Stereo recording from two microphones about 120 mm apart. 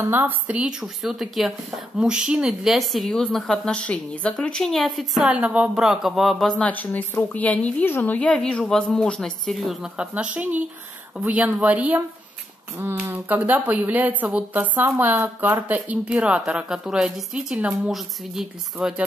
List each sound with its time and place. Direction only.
0.0 s speech: 20° right (ahead or behind); by 6.7 s 5° left (ahead or behind)
6.7 s a woman's voice: 15° left (ahead or behind); by 12.0 s 10° right (ahead or behind)
12.7 s speech: 25° right (ahead or behind); by 19.0 s 5° right (ahead or behind)